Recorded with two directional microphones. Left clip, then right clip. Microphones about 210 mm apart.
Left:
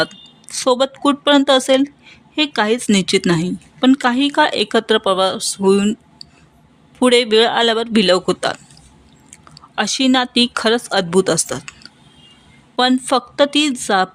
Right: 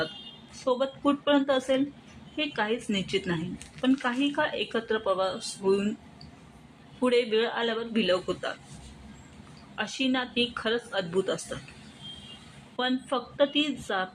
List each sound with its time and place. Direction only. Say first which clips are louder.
0.6 s a woman's voice: left 11 dB; 60° left (ahead or behind)
7.0 s a woman's voice: left 12 dB; 55° left (ahead or behind)
9.7 s a woman's voice: left 13 dB; 60° left (ahead or behind)
12.7 s a woman's voice: left 14 dB; 60° left (ahead or behind)